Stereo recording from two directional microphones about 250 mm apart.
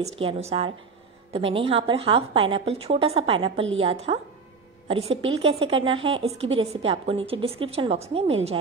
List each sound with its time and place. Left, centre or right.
0.0 s a woman's voice: right